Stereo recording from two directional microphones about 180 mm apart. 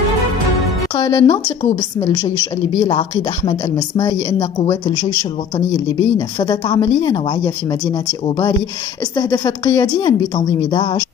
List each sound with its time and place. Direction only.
0.9 s a woman's voice: 15° left (ahead or behind)
6.1 s a woman's voice: 25° left (ahead or behind)
9.1 s a woman's voice: 20° left (ahead or behind)